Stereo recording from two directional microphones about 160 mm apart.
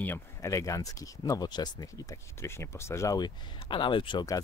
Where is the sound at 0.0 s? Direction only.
15° left (ahead or behind).